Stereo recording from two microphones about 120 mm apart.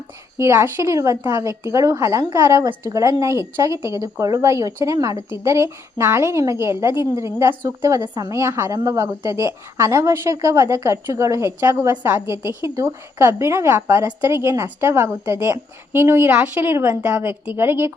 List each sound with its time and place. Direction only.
0.3 s a woman's voice: 25° right (ahead or behind)